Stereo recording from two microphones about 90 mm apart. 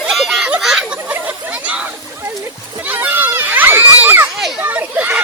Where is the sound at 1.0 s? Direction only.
15° right (ahead or behind).